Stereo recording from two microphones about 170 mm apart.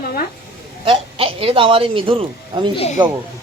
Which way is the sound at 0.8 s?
30° right (ahead or behind).